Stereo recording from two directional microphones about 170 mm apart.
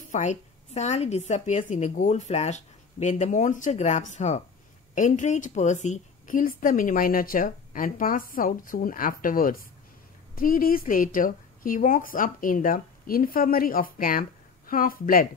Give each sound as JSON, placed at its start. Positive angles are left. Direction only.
{"t": 0.1, "sound": "a woman's voice", "side_deg": 45}